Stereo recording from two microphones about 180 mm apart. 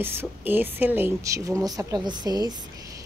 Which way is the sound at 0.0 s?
10° right (ahead or behind).